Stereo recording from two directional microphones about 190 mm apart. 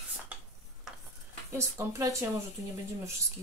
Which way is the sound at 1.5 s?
15° right (ahead or behind).